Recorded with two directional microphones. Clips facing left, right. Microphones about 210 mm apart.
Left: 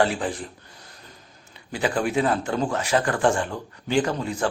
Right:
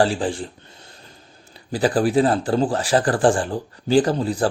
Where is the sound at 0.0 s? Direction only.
30° right (ahead or behind).